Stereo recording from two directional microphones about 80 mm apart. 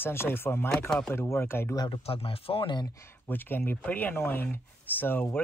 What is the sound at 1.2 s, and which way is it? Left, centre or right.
Speech, left.